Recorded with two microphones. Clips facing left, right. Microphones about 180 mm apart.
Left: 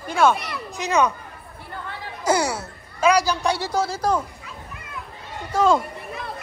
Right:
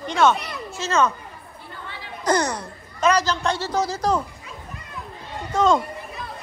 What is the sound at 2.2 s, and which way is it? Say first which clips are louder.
Speech: even; 10° left (ahead or behind).